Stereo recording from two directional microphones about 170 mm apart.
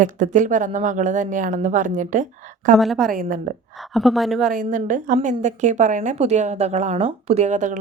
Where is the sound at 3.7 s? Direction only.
Centre (ahead or behind).